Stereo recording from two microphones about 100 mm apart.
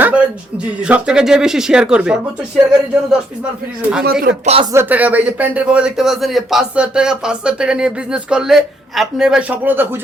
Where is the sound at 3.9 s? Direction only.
10° right (ahead or behind).